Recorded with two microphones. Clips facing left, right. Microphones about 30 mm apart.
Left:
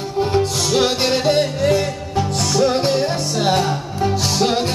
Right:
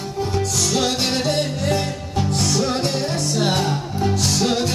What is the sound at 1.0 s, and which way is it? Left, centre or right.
Music, centre.